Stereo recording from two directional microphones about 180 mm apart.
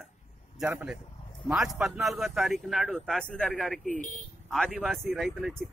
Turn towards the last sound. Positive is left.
turn(degrees=5)  # may be behind; listen again after turning